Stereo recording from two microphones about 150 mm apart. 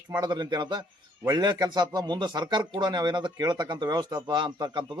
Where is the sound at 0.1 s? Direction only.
25° right (ahead or behind).